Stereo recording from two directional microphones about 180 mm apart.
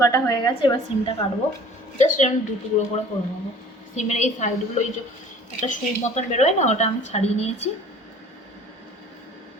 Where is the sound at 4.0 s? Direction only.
40° left (ahead or behind).